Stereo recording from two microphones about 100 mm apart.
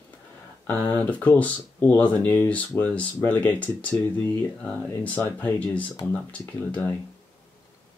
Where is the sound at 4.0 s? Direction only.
25° left (ahead or behind).